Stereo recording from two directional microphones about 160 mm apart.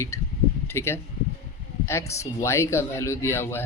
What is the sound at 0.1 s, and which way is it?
Speech, 20° left (ahead or behind).